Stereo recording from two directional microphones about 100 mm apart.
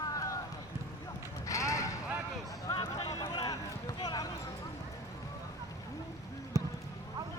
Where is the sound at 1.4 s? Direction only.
35° left (ahead or behind).